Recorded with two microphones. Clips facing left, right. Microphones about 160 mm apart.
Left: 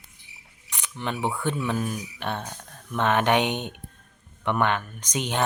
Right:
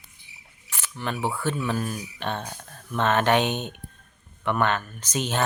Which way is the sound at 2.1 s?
10° left (ahead or behind).